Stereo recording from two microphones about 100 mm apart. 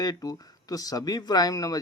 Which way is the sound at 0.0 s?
40° left (ahead or behind).